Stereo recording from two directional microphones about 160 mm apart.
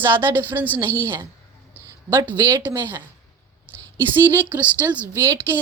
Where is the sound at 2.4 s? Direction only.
15° right (ahead or behind).